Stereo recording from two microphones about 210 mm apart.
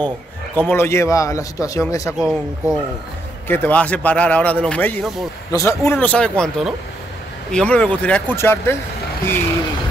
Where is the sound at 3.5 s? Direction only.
10° left (ahead or behind).